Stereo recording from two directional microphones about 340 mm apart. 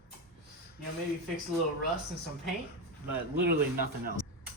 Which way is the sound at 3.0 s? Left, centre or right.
Right.